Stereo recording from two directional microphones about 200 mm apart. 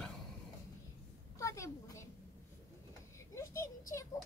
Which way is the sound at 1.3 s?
15° left (ahead or behind).